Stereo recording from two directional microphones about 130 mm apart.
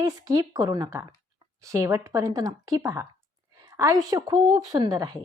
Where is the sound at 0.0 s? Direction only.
25° right (ahead or behind).